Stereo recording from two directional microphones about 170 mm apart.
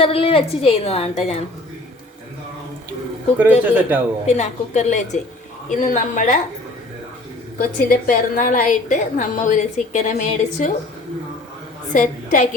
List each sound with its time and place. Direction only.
0.0 s a woman's voice: 35° left (ahead or behind)
3.3 s speech: 10° right (ahead or behind)
4.3 s a woman's voice: 40° left (ahead or behind)
7.8 s a woman's voice: 55° left (ahead or behind)
11.9 s a woman's voice: 50° left (ahead or behind)